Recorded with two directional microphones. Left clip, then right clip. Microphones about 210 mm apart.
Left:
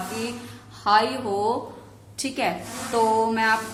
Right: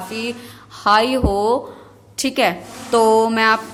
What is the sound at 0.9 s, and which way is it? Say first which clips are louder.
A woman's voice: right 5 dB; 50° right (ahead or behind).